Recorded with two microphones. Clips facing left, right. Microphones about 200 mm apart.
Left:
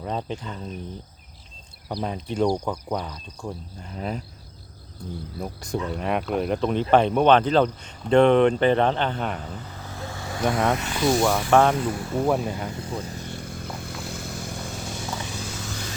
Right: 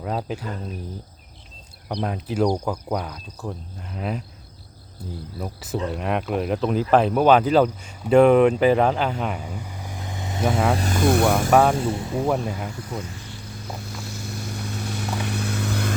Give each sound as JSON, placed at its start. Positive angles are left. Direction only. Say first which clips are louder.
{"t": 0.0, "sound": "speech", "louder": "right 2 dB", "side_deg": -5}
{"t": 1.9, "sound": "speech", "louder": "right 2 dB", "side_deg": 0}
{"t": 10.7, "sound": "speech", "louder": "right 2 dB", "side_deg": -35}
{"t": 11.7, "sound": "speech", "louder": "right 2 dB", "side_deg": -25}
{"t": 12.1, "sound": "speech", "louder": "left 2 dB", "side_deg": 0}
{"t": 13.4, "sound": "vehicle", "louder": "left 1 dB", "side_deg": 50}
{"t": 14.8, "sound": "vehicle", "louder": "right 7 dB", "side_deg": -65}